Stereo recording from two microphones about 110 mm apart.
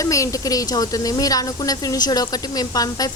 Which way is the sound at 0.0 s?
30° left (ahead or behind).